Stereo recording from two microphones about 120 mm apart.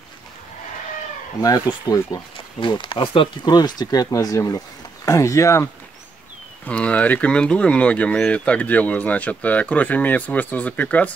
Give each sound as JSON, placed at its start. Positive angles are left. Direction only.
{"t": 1.4, "sound": "speech", "side_deg": 30}
{"t": 2.3, "sound": "speech", "side_deg": 40}
{"t": 3.5, "sound": "speech", "side_deg": 35}
{"t": 6.6, "sound": "speech", "side_deg": 10}